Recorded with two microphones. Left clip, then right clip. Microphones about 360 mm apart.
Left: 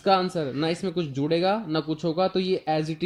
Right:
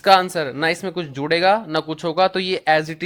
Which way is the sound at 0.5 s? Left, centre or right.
Right.